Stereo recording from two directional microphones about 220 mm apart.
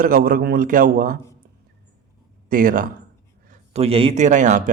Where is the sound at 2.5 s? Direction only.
40° right (ahead or behind).